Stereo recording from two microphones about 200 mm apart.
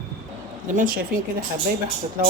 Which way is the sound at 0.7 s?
45° right (ahead or behind).